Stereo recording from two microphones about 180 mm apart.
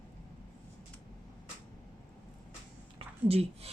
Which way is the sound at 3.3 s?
35° right (ahead or behind).